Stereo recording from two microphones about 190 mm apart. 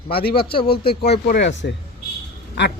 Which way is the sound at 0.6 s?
55° left (ahead or behind).